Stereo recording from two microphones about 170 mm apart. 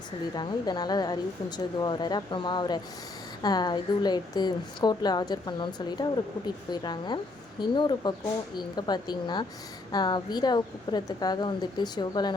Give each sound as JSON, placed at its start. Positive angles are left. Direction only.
{"t": 0.3, "sound": "a woman's voice", "side_deg": 25}